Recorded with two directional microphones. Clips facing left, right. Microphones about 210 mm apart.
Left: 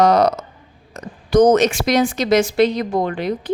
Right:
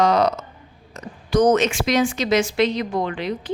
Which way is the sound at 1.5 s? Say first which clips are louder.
Left 3 dB; 40° left (ahead or behind).